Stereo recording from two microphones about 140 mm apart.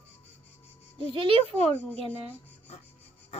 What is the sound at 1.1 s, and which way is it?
Speech, 35° right (ahead or behind).